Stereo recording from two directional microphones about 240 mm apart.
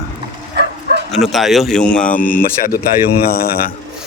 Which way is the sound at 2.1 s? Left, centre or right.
Left.